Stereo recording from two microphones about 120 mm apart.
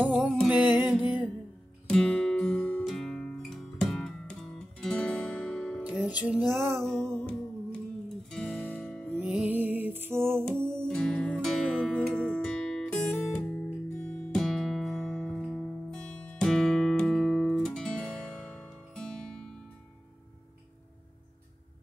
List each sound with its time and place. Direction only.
0.0 s music: 15° right (ahead or behind)
1.9 s music: 5° left (ahead or behind)
5.9 s music: 10° right (ahead or behind)
6.6 s music: 5° left (ahead or behind)
8.3 s music: 10° left (ahead or behind)
9.1 s music: 10° right (ahead or behind)
10.9 s music: 5° left (ahead or behind)
13.2 s guitar: 10° left (ahead or behind)
15.4 s music: centre (ahead or behind)